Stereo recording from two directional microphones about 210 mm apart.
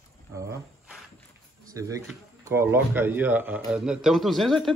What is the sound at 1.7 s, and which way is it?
Speech, 15° right (ahead or behind).